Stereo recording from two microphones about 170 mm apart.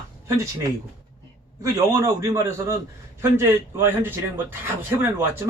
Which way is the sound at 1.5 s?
20° right (ahead or behind).